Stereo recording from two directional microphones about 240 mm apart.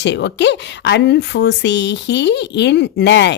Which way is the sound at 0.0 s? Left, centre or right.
Left.